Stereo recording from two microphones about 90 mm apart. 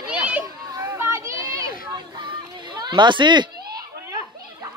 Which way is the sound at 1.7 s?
60° right (ahead or behind).